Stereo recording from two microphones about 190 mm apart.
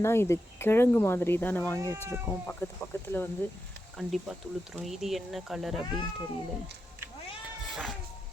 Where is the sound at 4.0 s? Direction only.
Centre (ahead or behind).